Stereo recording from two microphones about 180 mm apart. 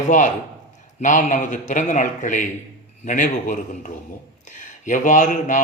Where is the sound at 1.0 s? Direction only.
45° left (ahead or behind).